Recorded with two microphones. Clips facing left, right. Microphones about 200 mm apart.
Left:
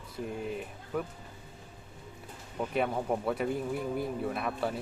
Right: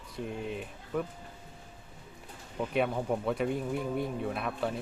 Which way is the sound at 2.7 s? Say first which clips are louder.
Right 1 dB; centre (ahead or behind).